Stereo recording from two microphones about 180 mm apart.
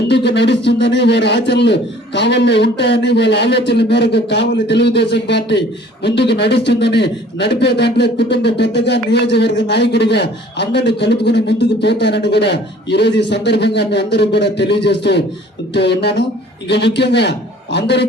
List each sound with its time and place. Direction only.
0.1 s a man's voice: 70° left (ahead or behind)